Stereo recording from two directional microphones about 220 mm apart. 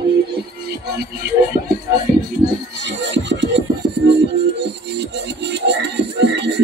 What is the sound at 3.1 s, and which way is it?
Scratching, 55° right (ahead or behind).